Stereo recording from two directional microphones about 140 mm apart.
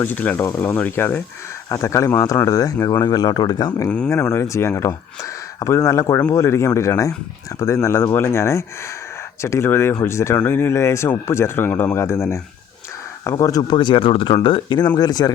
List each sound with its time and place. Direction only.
0.0 s speech: 10° left (ahead or behind); by 3.8 s 30° left (ahead or behind)
3.8 s speech: 5° left (ahead or behind)
4.1 s speech: 20° left (ahead or behind)